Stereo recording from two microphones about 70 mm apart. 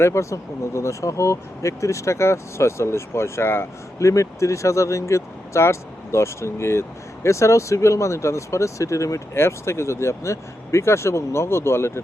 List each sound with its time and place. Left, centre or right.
0.0 s speech: left
4.0 s speech: left